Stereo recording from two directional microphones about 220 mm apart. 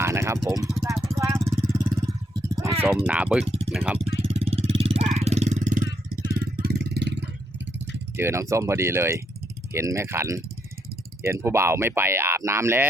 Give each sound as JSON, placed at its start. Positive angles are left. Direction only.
{"t": 0.0, "sound": "a sound", "side_deg": -10}
{"t": 0.4, "sound": "speech", "side_deg": -15}
{"t": 1.0, "sound": "vehicle", "side_deg": -15}
{"t": 1.6, "sound": "a sound", "side_deg": -15}
{"t": 3.1, "sound": "speech", "side_deg": -5}
{"t": 3.9, "sound": "vehicle", "side_deg": -25}
{"t": 6.6, "sound": "vehicle", "side_deg": -45}
{"t": 8.1, "sound": "speech", "side_deg": -10}